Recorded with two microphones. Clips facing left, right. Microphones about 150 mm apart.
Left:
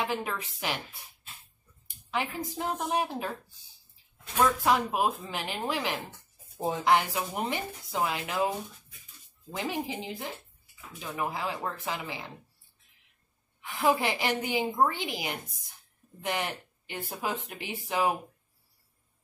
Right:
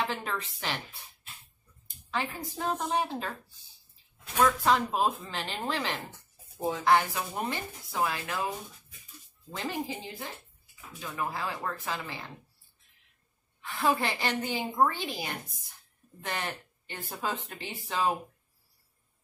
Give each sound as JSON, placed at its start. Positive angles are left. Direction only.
{"t": 0.0, "sound": "a woman's voice", "side_deg": 10}
{"t": 2.0, "sound": "a woman's voice", "side_deg": 15}
{"t": 4.4, "sound": "a woman's voice", "side_deg": 10}
{"t": 9.6, "sound": "a woman's voice", "side_deg": 15}
{"t": 13.6, "sound": "a woman's voice", "side_deg": 15}